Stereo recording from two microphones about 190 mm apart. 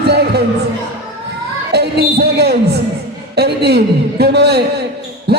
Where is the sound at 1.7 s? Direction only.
60° right (ahead or behind).